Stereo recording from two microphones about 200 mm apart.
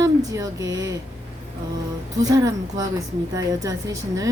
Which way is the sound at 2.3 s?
15° right (ahead or behind).